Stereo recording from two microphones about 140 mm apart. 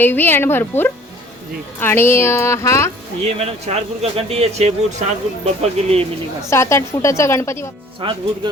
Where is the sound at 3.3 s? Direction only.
45° right (ahead or behind).